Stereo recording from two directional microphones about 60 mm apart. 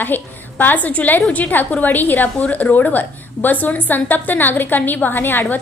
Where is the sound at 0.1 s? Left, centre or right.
Left.